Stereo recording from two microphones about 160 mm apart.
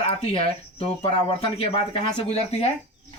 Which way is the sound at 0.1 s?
40° left (ahead or behind).